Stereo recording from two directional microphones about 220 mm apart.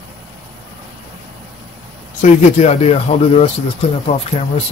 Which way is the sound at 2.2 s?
30° left (ahead or behind).